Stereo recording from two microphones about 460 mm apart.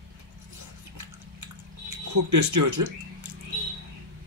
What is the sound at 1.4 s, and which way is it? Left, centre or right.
Drip, right.